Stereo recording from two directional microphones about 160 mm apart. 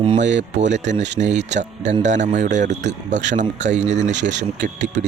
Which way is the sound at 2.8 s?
90° right.